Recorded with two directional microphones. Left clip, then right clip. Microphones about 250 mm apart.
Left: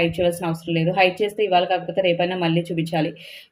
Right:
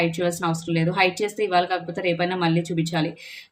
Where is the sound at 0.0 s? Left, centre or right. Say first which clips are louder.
Left 2 dB; centre.